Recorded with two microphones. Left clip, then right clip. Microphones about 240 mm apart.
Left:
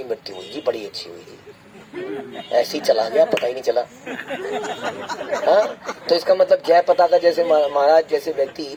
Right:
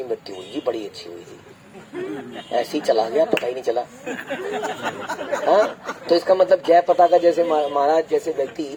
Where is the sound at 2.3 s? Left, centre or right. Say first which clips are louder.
Left 4 dB; left.